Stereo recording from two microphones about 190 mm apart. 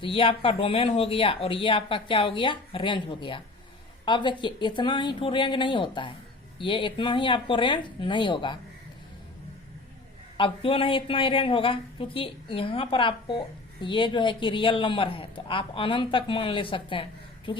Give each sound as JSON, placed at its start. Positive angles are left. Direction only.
{"t": 0.0, "sound": "a man's voice", "side_deg": 30}
{"t": 10.3, "sound": "a man's voice", "side_deg": 30}